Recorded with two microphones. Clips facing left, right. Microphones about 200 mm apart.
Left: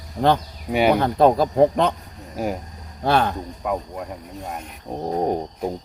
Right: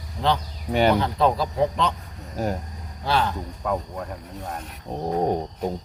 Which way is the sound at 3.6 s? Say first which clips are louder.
Left 1 dB; 10° left (ahead or behind).